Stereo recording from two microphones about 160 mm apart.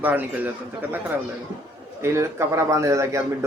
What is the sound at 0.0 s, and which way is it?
A man's voice, 10° right (ahead or behind).